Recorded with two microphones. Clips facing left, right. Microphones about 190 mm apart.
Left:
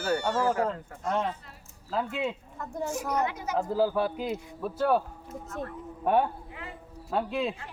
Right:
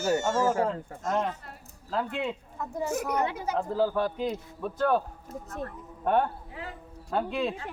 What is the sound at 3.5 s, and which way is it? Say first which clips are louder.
Speech: left 1 dB; 5° left (ahead or behind).